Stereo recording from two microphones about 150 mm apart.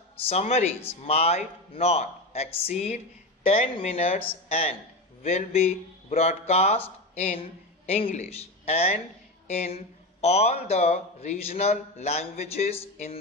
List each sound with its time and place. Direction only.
0.3 s a man's voice: 45° left (ahead or behind)